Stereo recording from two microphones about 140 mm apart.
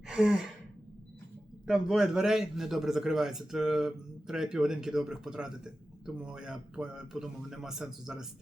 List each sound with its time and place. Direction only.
0.1 s sigh: centre (ahead or behind)
1.6 s a man's voice: 5° right (ahead or behind)